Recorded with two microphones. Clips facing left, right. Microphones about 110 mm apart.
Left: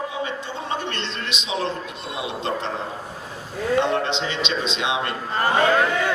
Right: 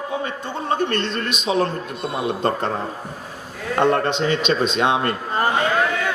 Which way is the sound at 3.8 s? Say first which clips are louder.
Right 5 dB; 50° right (ahead or behind).